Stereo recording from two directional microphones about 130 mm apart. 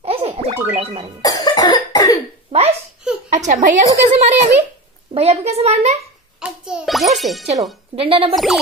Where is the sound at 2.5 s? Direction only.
50° right (ahead or behind).